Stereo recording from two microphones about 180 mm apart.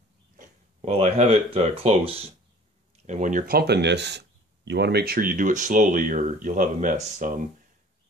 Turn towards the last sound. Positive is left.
turn(degrees=-45)  # may be behind; listen again after turning